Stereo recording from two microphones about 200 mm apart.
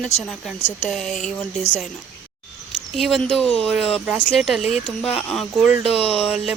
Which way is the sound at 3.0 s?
Centre (ahead or behind).